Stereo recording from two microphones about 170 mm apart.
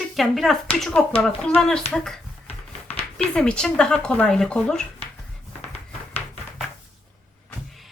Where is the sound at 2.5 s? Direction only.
35° left (ahead or behind).